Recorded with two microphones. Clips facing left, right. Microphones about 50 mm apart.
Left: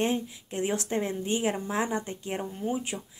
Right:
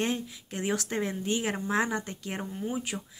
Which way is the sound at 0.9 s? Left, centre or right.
Right.